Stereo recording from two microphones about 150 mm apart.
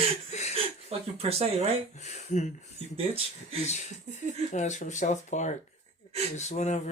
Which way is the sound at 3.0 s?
40° right (ahead or behind).